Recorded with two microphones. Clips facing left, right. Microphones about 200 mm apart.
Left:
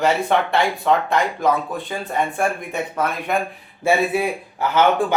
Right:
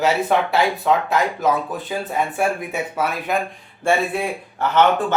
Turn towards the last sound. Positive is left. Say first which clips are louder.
# even
turn(degrees=10)  # may be behind; listen again after turning